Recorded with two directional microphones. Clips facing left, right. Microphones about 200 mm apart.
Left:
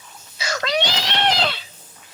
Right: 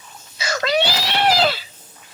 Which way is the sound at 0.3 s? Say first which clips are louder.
Right 3 dB; 5° right (ahead or behind).